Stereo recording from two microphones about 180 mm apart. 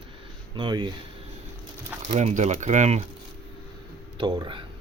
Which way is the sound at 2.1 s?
40° right (ahead or behind).